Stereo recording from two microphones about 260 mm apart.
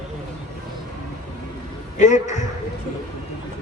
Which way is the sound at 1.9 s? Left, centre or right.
Left.